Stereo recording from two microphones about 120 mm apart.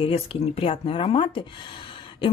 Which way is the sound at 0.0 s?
55° left (ahead or behind).